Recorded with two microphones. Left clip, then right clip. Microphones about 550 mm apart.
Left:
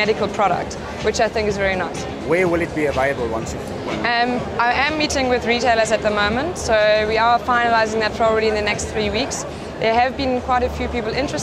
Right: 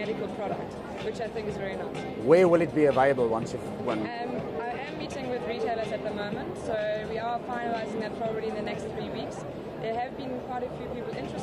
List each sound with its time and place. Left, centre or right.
1.2 s speech: left
2.2 s speech: right
4.0 s speech: left